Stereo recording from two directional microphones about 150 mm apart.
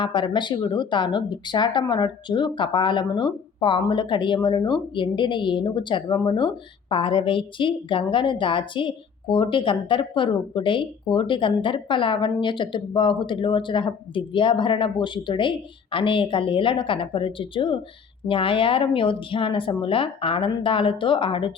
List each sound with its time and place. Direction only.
0.0 s a woman's voice: 30° left (ahead or behind)